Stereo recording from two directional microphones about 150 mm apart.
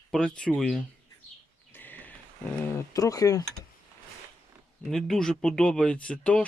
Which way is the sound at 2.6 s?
20° left (ahead or behind).